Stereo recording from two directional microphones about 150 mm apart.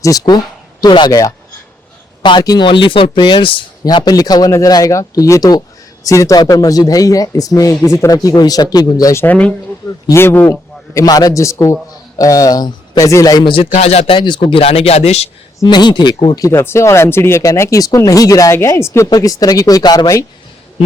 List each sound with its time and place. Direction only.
0.0 s speech: 25° left (ahead or behind)
9.2 s speech: 10° left (ahead or behind); by 13.5 s 25° left (ahead or behind)
13.7 s a man's voice: 50° left (ahead or behind)
14.2 s speech: 30° left (ahead or behind)
15.6 s speech: 30° left (ahead or behind)